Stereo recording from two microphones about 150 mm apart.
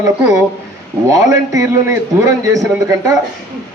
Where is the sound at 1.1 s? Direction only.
20° right (ahead or behind).